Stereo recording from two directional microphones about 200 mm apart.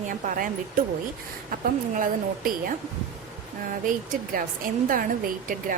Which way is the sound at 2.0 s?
45° right (ahead or behind).